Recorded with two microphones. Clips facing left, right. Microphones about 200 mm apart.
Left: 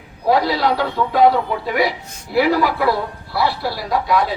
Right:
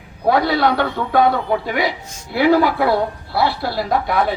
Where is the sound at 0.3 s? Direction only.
55° right (ahead or behind).